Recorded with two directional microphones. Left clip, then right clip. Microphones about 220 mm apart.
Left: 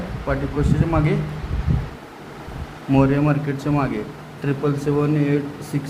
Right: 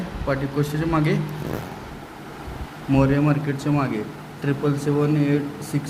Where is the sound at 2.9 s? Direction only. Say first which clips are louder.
Left 2 dB; 5° left (ahead or behind).